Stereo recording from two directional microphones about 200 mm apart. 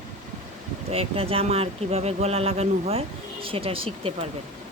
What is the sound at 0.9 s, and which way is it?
Speech, 30° right (ahead or behind).